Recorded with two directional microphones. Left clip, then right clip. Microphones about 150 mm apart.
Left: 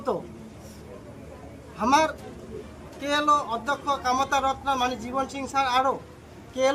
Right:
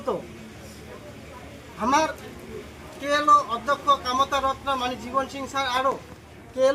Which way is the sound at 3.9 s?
30° left (ahead or behind).